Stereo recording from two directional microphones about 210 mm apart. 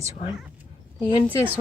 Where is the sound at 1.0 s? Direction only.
25° left (ahead or behind).